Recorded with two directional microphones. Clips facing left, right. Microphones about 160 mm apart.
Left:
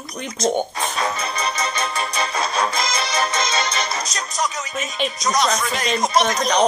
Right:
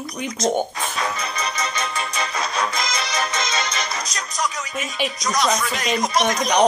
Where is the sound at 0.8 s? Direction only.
30° left (ahead or behind).